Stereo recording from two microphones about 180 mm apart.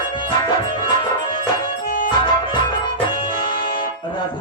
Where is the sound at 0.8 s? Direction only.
25° left (ahead or behind).